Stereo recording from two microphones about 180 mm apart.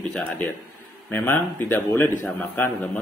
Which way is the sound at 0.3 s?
5° left (ahead or behind).